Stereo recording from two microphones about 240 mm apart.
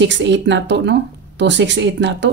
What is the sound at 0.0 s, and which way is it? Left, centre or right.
A woman's voice, right.